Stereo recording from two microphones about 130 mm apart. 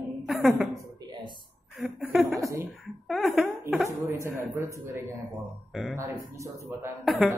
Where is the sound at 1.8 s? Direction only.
Centre (ahead or behind).